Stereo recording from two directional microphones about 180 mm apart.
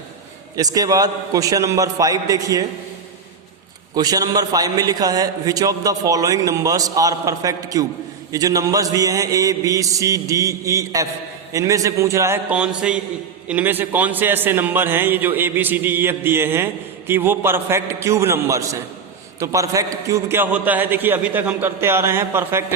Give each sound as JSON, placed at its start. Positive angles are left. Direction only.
{"t": 0.5, "sound": "a man's voice", "side_deg": -20}
{"t": 3.9, "sound": "a man's voice", "side_deg": -20}